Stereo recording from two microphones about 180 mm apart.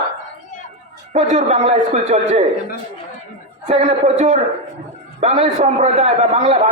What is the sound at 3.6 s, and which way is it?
Speech, 40° right (ahead or behind).